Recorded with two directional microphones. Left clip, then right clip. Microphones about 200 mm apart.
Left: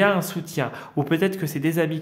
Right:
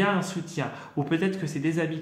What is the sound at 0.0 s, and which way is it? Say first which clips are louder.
Speech: left 6 dB; 45° left (ahead or behind).